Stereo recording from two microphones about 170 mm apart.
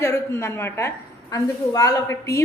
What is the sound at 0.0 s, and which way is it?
A woman's voice, 15° left (ahead or behind).